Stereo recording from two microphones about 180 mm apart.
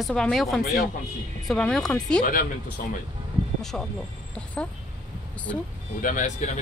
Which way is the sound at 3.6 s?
5° left (ahead or behind).